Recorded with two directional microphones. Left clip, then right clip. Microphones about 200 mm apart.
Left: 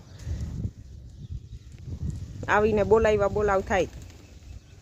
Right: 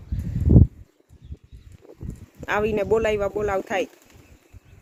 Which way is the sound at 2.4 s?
5° right (ahead or behind).